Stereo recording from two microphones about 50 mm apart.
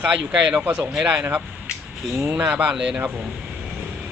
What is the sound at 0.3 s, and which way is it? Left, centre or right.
Speech, right.